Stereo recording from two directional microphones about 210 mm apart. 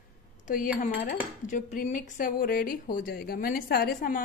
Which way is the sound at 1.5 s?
35° left (ahead or behind).